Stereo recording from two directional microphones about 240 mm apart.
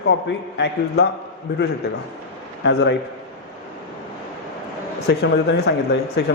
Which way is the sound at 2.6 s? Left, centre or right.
Left.